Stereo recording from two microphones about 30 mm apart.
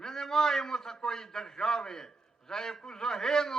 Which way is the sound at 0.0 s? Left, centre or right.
Centre.